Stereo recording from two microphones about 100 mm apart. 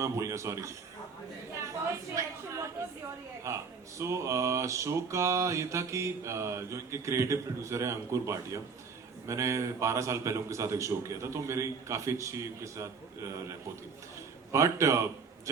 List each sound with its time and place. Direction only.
0.0 s a man's voice: 30° right (ahead or behind)
2.2 s a man's voice: 30° right (ahead or behind)
3.4 s speech: 30° right (ahead or behind)
14.5 s a man's voice: 30° right (ahead or behind)